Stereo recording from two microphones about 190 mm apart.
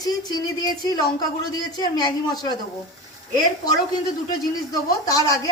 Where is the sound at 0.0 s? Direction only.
20° left (ahead or behind).